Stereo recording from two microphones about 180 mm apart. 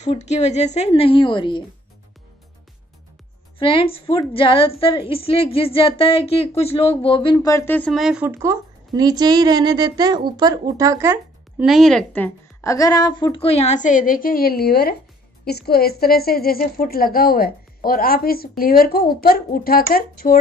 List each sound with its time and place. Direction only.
0.0 s a woman's voice: 40° left (ahead or behind)
3.5 s a woman's voice: 30° left (ahead or behind)
7.3 s speech: 15° left (ahead or behind)
7.9 s a woman's voice: 5° right (ahead or behind)
11.6 s a woman's voice: centre (ahead or behind); by 20.3 s 55° left (ahead or behind)